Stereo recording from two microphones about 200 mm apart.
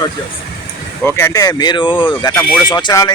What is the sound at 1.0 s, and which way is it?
Speech, 10° left (ahead or behind).